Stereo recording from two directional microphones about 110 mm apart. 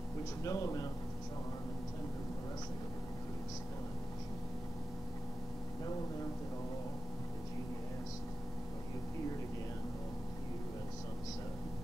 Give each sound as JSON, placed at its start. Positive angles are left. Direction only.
{"t": 0.4, "sound": "speech", "side_deg": 30}